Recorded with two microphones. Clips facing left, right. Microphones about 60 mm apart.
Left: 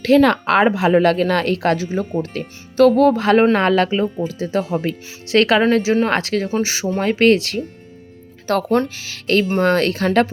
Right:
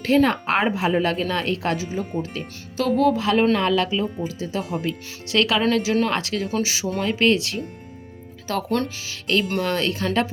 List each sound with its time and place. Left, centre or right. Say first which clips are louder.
0.0 s a woman's voice: left 5 dB; left